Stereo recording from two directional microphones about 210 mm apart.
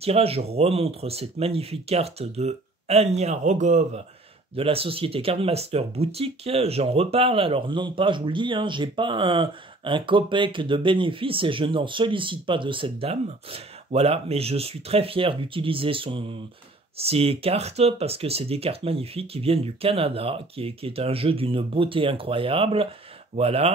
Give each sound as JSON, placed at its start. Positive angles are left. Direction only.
{"t": 0.0, "sound": "speech", "side_deg": -30}